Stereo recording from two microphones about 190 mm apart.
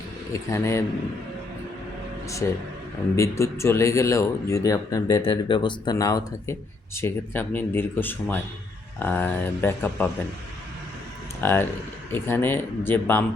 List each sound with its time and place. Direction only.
0.3 s speech: 15° left (ahead or behind)
2.4 s speech: 10° left (ahead or behind)
11.3 s speech: 10° left (ahead or behind)